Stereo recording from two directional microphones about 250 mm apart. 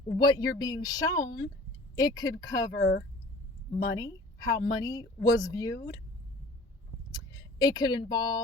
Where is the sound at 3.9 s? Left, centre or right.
Centre.